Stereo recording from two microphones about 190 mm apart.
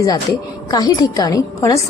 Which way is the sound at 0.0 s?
20° left (ahead or behind).